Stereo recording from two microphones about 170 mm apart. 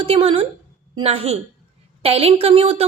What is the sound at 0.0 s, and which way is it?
A woman's voice, 35° right (ahead or behind).